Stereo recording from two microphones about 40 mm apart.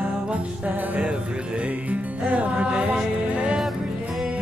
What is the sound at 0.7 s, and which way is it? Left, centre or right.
Music, right.